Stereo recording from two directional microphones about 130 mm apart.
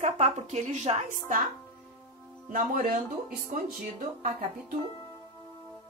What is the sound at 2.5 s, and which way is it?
Speech, 90° right.